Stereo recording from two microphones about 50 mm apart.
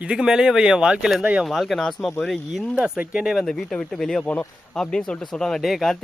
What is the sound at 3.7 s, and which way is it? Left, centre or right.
Speech, centre.